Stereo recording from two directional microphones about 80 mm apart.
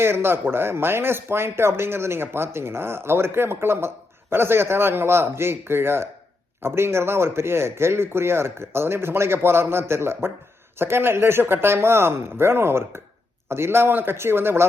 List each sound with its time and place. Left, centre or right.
0.0 s a man's voice: right